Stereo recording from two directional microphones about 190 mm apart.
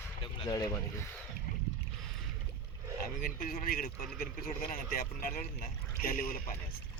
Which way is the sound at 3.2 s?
50° left (ahead or behind).